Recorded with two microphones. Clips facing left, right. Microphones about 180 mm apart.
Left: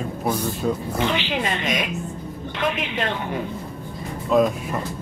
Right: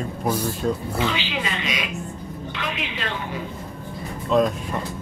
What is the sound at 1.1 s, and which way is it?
Roaring cats, 50° left (ahead or behind).